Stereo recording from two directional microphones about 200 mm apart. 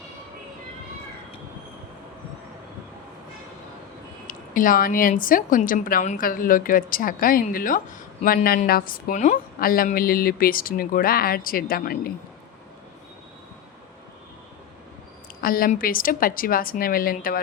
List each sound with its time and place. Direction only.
4.3 s a woman's voice: 45° left (ahead or behind)
15.4 s a woman's voice: 45° left (ahead or behind)